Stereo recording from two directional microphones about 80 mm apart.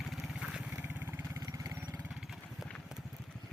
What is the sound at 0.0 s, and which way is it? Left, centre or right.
Vehicle, centre.